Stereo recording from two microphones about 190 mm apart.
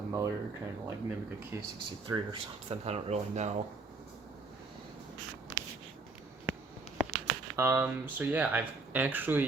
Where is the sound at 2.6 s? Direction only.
35° right (ahead or behind).